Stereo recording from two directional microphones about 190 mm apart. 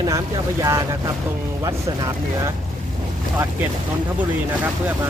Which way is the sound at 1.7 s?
20° right (ahead or behind).